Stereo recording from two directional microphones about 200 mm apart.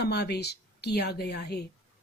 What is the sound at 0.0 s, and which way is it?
Speech, 55° left (ahead or behind).